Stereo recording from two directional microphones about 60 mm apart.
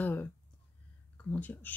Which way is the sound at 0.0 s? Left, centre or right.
Left.